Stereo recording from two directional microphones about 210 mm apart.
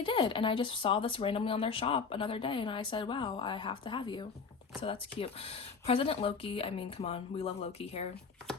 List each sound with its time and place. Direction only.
0.0 s speech: 25° left (ahead or behind)